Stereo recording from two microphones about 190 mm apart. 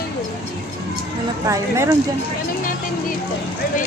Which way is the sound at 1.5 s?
15° right (ahead or behind).